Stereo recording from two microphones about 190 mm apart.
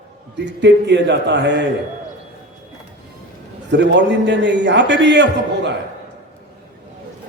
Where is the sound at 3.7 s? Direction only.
65° right (ahead or behind).